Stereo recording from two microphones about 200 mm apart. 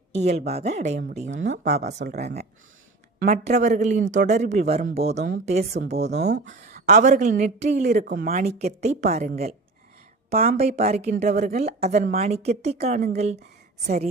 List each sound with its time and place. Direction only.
0.1 s speech: 30° right (ahead or behind)
6.1 s speech: 60° right (ahead or behind)
6.5 s a sound: 35° right (ahead or behind)
7.0 s speech: 35° right (ahead or behind)
8.0 s speech: 50° right (ahead or behind)
8.3 s speech: 35° right (ahead or behind)
10.4 s speech: 35° right (ahead or behind)